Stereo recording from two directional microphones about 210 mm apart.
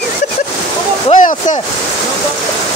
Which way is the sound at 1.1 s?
35° left (ahead or behind).